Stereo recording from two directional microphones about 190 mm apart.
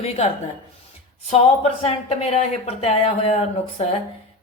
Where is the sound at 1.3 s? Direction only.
35° left (ahead or behind).